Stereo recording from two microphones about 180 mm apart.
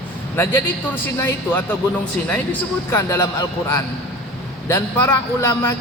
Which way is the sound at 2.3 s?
10° left (ahead or behind).